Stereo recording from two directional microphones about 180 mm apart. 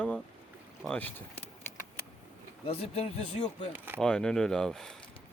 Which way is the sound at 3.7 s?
10° right (ahead or behind).